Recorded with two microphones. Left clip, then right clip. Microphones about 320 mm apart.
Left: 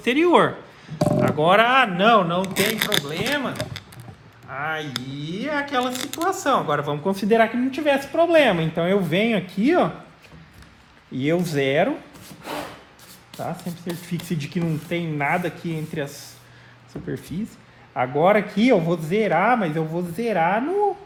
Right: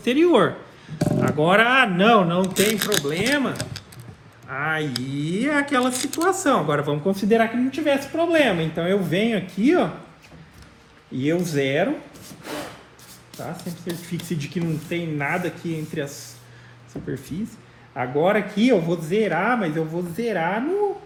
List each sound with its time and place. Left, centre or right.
0.0 s speech: left
11.2 s speech: left
13.3 s speech: centre
17.1 s speech: left